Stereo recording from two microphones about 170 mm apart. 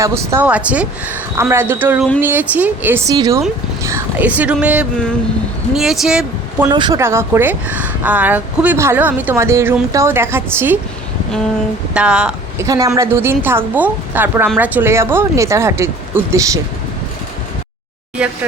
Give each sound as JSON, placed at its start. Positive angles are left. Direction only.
{"t": 0.0, "sound": "speech", "side_deg": -15}
{"t": 3.1, "sound": "speech", "side_deg": -20}
{"t": 6.7, "sound": "speech", "side_deg": -25}
{"t": 11.9, "sound": "speech", "side_deg": -5}
{"t": 12.5, "sound": "speech", "side_deg": -20}